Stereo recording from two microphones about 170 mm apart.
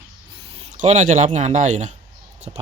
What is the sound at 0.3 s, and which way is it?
Speech, 30° right (ahead or behind).